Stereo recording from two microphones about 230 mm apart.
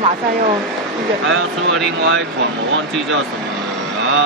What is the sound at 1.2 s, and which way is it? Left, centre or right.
Speech, right.